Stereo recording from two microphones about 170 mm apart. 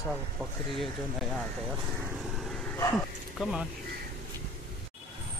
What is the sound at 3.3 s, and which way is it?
Speech, 5° right (ahead or behind).